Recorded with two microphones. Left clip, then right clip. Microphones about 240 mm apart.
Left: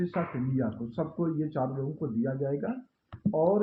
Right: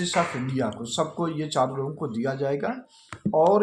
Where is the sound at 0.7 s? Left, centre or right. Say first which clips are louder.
Right 7 dB; centre.